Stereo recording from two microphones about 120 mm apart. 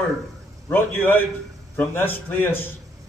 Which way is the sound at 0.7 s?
15° left (ahead or behind).